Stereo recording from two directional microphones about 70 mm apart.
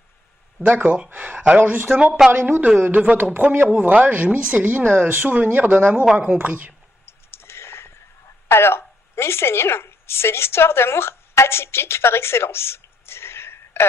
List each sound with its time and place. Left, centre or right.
0.7 s speech: centre
2.2 s a woman's voice: centre
2.8 s a woman's voice: right
7.1 s a sound: left
8.5 s a woman's voice: left